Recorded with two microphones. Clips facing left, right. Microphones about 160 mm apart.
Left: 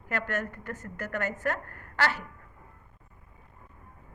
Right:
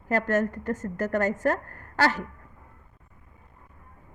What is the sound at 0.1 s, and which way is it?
A woman's voice, 40° right (ahead or behind).